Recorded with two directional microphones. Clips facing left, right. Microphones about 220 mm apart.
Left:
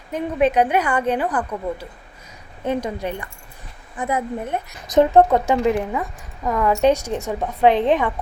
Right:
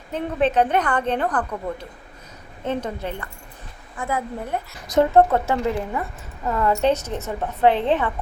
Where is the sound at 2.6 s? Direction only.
10° left (ahead or behind).